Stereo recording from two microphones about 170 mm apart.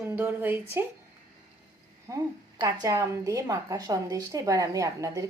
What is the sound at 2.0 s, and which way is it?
A woman's voice, 20° right (ahead or behind).